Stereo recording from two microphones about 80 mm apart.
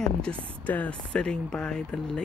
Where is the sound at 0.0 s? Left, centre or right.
Centre.